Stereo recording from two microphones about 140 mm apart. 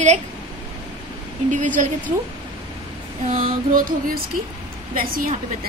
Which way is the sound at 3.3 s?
75° right (ahead or behind).